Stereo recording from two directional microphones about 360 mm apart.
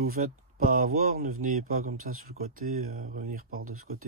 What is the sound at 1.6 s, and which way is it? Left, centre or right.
Speech, right.